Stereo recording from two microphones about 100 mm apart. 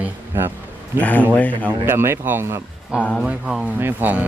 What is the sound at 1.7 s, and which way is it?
Speech, 25° right (ahead or behind).